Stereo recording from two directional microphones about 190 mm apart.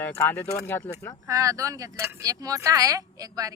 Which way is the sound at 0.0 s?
10° left (ahead or behind).